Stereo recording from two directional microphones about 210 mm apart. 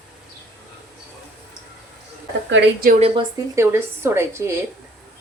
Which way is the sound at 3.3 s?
15° right (ahead or behind).